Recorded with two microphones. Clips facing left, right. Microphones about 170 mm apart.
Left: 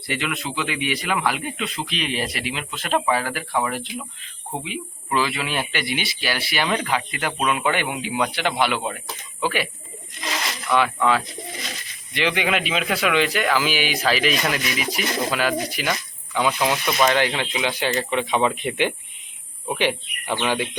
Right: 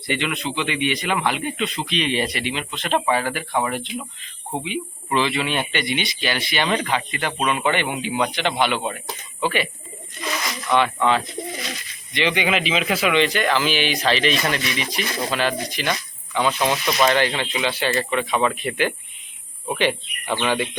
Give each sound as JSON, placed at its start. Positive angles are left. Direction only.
{"t": 0.1, "sound": "speech", "side_deg": 5}
{"t": 10.8, "sound": "speech", "side_deg": 5}